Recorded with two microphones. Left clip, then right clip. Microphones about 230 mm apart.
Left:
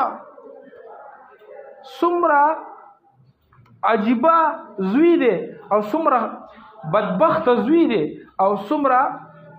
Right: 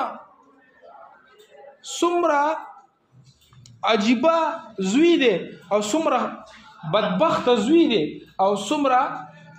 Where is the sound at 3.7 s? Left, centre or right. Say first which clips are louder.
Left 2 dB; centre.